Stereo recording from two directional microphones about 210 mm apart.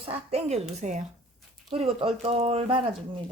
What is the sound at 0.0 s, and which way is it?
Speech, 30° right (ahead or behind).